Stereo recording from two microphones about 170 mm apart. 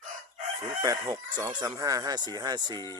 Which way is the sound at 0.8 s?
20° right (ahead or behind).